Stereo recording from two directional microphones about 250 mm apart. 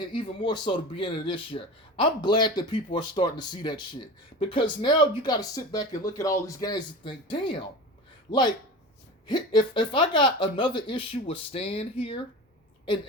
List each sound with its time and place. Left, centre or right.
0.1 s speech: centre